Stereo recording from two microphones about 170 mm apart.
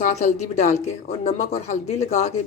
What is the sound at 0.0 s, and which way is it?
A woman's voice, 45° left (ahead or behind).